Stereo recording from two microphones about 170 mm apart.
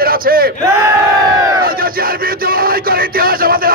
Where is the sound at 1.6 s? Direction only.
60° right (ahead or behind).